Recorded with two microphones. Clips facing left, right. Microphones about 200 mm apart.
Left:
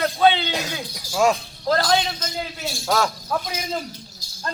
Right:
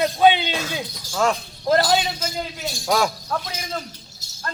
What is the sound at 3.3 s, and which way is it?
Speech, 5° left (ahead or behind).